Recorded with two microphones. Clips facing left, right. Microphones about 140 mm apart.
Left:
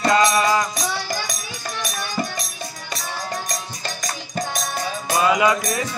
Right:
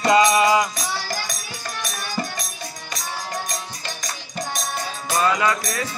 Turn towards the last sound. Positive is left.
turn(degrees=15)  # may be behind; listen again after turning